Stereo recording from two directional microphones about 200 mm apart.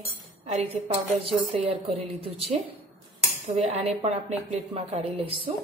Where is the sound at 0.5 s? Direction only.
35° right (ahead or behind).